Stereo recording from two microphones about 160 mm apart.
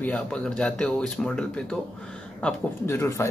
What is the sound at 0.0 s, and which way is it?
Speech, 10° left (ahead or behind).